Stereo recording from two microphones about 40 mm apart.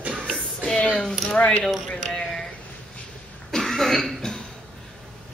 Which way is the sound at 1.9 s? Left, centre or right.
Centre.